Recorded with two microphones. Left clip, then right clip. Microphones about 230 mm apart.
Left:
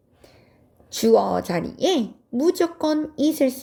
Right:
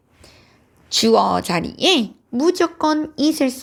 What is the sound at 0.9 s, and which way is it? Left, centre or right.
A woman's voice, centre.